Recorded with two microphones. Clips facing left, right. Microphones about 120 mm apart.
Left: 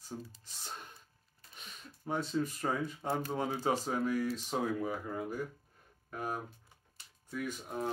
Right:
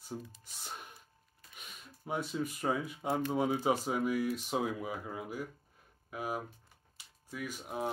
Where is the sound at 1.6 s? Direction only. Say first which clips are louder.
Left 1 dB; 5° right (ahead or behind).